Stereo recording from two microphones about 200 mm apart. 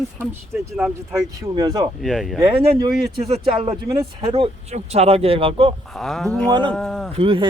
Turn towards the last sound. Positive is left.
turn(degrees=-25)  # may be behind; listen again after turning